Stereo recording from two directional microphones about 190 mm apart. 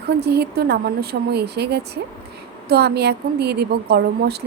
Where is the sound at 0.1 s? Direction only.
60° right (ahead or behind).